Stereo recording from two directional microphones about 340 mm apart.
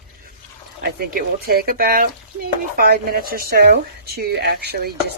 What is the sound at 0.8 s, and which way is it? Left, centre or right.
Speech, right.